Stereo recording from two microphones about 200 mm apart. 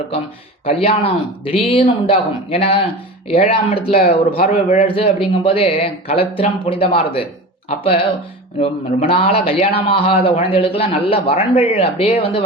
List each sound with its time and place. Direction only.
0.6 s speech: 30° left (ahead or behind)
3.9 s speech: 45° left (ahead or behind); by 12.4 s 25° left (ahead or behind)